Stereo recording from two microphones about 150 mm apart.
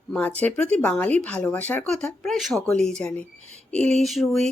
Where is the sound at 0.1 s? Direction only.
10° left (ahead or behind).